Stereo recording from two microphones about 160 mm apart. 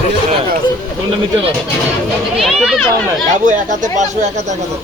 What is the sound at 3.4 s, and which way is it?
Speech, 50° right (ahead or behind).